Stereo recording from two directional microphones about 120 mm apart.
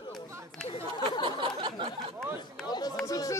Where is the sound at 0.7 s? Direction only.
50° left (ahead or behind).